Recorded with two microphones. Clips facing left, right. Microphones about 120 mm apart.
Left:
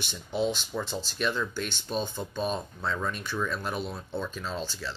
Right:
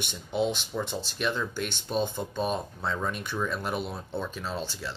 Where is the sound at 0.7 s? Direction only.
10° right (ahead or behind).